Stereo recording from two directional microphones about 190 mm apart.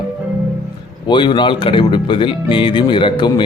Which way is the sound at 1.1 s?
25° left (ahead or behind).